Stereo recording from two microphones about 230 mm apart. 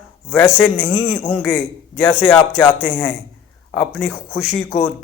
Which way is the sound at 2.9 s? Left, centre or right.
Centre.